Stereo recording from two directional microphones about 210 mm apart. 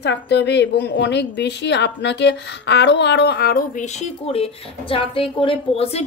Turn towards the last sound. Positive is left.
turn(degrees=30)  # may be behind; listen again after turning